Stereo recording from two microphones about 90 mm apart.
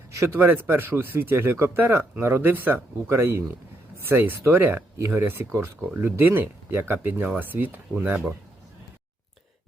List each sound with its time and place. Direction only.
0.1 s speech: 30° right (ahead or behind)